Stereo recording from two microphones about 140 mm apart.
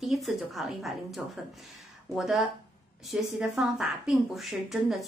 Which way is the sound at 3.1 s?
5° right (ahead or behind).